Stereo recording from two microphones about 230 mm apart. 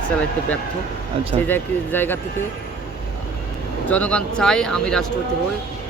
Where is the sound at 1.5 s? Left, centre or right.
Centre.